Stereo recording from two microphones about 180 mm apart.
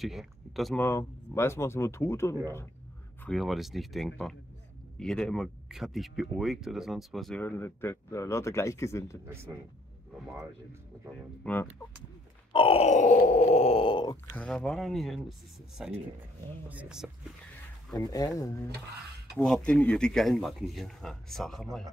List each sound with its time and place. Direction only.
0.0 s speech: centre (ahead or behind)
0.7 s speech: 15° left (ahead or behind)
3.3 s speech: centre (ahead or behind); by 9.2 s 15° left (ahead or behind)
9.3 s speech: 15° right (ahead or behind)
11.4 s speech: 10° left (ahead or behind)
12.5 s groan: 30° left (ahead or behind)
14.3 s speech: 5° left (ahead or behind)
17.9 s speech: 20° left (ahead or behind)
19.3 s speech: 5° left (ahead or behind)